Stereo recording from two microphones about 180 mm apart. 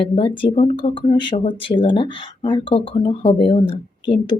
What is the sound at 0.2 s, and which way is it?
Speech, 25° left (ahead or behind).